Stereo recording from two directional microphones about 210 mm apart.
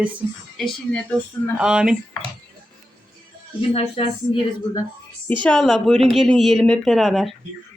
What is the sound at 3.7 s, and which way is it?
Speech, 25° left (ahead or behind).